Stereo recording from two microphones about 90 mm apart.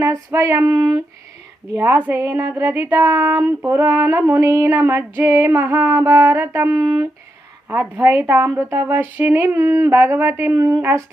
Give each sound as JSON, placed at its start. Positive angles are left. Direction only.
{"t": 0.0, "sound": "female singing", "side_deg": -35}
{"t": 1.8, "sound": "music", "side_deg": -20}
{"t": 6.7, "sound": "female singing", "side_deg": -40}
{"t": 7.7, "sound": "music", "side_deg": -20}
{"t": 9.6, "sound": "female singing", "side_deg": -35}